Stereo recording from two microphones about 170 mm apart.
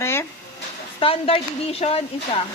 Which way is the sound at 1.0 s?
35° left (ahead or behind).